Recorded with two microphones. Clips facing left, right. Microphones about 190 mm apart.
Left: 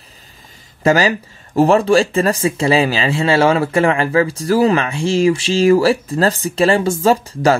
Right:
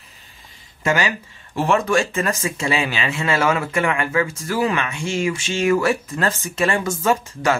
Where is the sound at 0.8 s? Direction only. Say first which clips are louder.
Left 7 dB; 35° left (ahead or behind).